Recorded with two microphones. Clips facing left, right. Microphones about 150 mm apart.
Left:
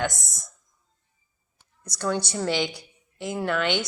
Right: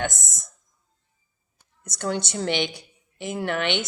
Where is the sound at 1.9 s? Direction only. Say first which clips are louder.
Left 1 dB; 25° right (ahead or behind).